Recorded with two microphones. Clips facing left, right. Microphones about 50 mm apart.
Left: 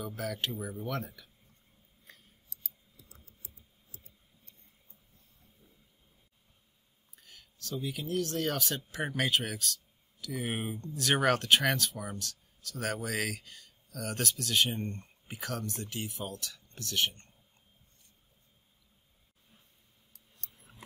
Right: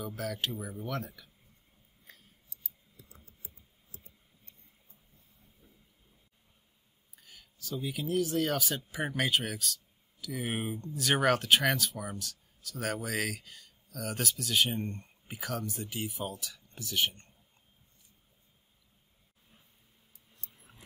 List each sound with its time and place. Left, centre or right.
0.0 s speech: centre
2.0 s scissors: centre
3.1 s typing: right
7.2 s speech: centre
20.7 s a sound: centre